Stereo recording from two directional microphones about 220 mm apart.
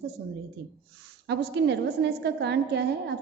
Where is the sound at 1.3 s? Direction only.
50° right (ahead or behind).